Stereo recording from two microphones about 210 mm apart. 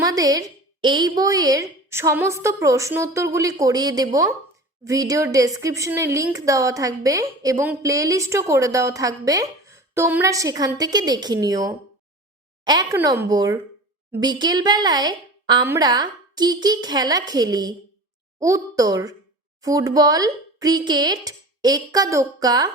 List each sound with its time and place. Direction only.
0.0 s a woman's voice: 15° right (ahead or behind)